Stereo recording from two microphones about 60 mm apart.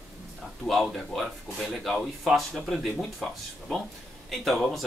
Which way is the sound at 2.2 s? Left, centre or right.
Centre.